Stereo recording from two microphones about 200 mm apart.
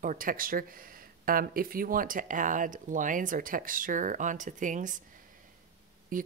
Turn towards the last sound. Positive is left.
turn(degrees=-45)  # may be behind; listen again after turning